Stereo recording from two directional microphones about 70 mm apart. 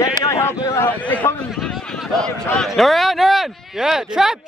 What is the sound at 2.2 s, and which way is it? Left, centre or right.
Speech, centre.